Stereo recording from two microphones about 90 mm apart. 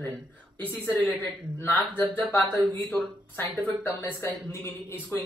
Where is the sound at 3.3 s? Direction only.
20° left (ahead or behind).